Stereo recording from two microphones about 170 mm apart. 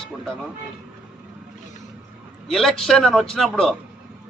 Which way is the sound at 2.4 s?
Centre (ahead or behind).